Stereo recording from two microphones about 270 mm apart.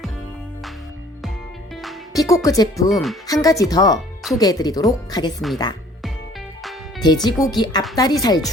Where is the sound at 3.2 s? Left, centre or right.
Centre.